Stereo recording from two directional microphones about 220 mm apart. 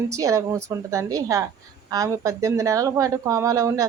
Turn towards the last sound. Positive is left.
turn(degrees=-15)  # may be behind; listen again after turning